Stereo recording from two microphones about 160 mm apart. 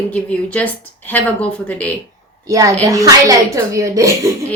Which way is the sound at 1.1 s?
10° left (ahead or behind).